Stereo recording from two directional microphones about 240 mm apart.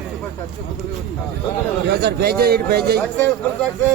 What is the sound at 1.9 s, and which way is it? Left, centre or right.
A man's voice, right.